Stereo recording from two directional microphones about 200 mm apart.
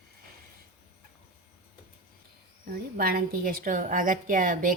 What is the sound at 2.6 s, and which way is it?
A woman's voice, 45° right (ahead or behind).